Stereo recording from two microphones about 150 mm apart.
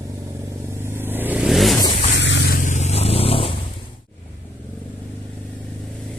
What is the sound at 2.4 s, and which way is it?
Vehicle, 70° left (ahead or behind).